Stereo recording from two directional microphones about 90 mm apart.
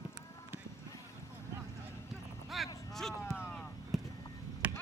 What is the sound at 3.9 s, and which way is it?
Vehicle, centre (ahead or behind).